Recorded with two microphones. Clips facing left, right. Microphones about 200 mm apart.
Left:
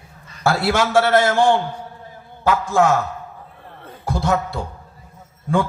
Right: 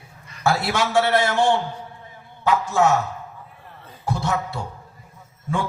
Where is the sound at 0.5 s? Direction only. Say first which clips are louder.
Left 4 dB; 55° left (ahead or behind).